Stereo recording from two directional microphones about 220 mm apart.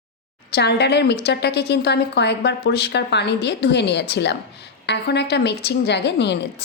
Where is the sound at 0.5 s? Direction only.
50° left (ahead or behind).